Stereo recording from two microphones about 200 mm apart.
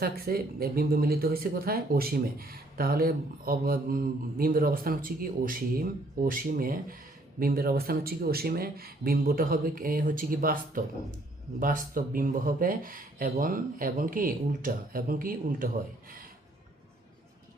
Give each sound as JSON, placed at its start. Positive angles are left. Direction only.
{"t": 0.0, "sound": "speech", "side_deg": -50}